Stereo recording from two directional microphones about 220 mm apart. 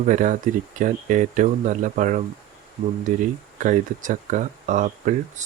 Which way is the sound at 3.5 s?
35° right (ahead or behind).